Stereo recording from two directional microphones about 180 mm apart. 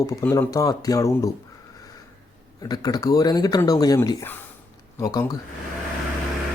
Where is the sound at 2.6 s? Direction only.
20° left (ahead or behind).